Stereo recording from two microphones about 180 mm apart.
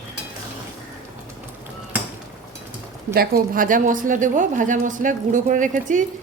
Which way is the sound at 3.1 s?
55° right (ahead or behind).